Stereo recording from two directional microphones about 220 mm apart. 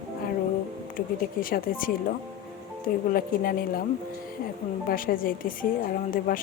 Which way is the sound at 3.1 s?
40° left (ahead or behind).